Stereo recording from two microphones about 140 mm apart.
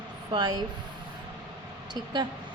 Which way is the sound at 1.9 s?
30° right (ahead or behind).